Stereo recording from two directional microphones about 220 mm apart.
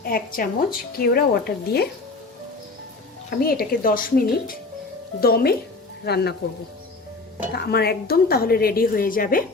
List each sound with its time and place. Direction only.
0.0 s a woman's voice: 40° left (ahead or behind)
3.2 s a woman's voice: 40° left (ahead or behind)
7.5 s a woman's voice: 45° left (ahead or behind)